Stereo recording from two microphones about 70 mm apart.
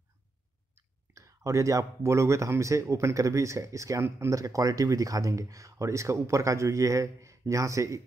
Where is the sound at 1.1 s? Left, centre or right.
Right.